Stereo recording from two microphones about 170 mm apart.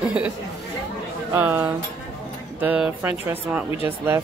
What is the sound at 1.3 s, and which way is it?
Speech, 15° right (ahead or behind).